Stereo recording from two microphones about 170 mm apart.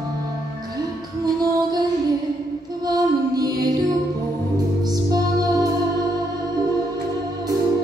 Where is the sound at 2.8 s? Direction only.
25° right (ahead or behind).